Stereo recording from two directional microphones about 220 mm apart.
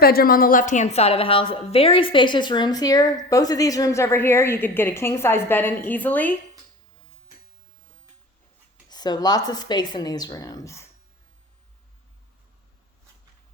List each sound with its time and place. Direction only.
0.0 s a woman's voice: 45° left (ahead or behind); by 6.3 s 10° left (ahead or behind)
8.9 s a woman's voice: 20° left (ahead or behind)